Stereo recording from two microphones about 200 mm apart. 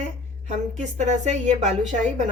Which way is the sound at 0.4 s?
35° right (ahead or behind).